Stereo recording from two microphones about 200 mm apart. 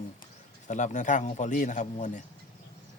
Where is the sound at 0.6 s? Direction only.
35° left (ahead or behind).